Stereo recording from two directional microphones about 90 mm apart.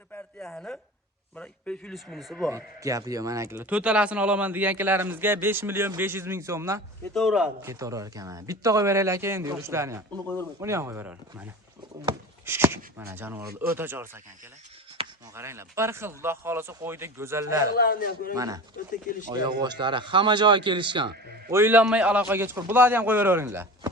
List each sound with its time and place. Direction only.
0.4 s speech: 5° left (ahead or behind)
1.9 s speech: centre (ahead or behind)
2.5 s speech: 35° right (ahead or behind)
3.7 s speech: 15° right (ahead or behind); by 6.8 s 35° right (ahead or behind)
7.1 s speech: 5° left (ahead or behind)
7.6 s speech: 35° right (ahead or behind)
12.5 s speech: 25° right (ahead or behind)
15.0 s a sound: 90° right
15.4 s speech: 30° right (ahead or behind)
19.3 s a man's voice: 50° right (ahead or behind); by 21.1 s 65° right (ahead or behind)
21.5 s speech: 25° right (ahead or behind)